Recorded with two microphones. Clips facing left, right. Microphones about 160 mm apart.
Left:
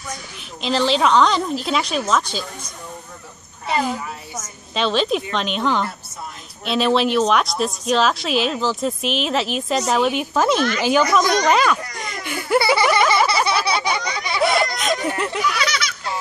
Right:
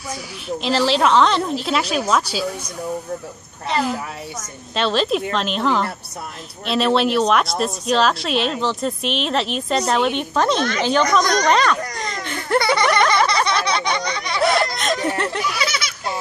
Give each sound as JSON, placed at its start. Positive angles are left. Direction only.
{"t": 0.6, "sound": "speech", "side_deg": 0}
{"t": 3.6, "sound": "speech", "side_deg": 0}
{"t": 12.2, "sound": "laughter", "side_deg": 5}
{"t": 15.4, "sound": "a sound", "side_deg": -25}